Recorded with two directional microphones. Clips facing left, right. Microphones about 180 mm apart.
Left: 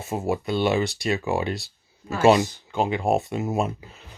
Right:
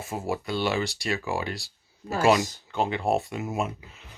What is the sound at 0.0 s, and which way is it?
Speech, 20° left (ahead or behind).